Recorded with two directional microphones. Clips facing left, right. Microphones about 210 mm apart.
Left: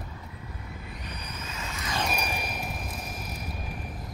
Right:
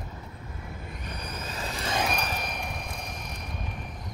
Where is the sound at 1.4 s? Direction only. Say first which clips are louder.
Right 4 dB; 35° right (ahead or behind).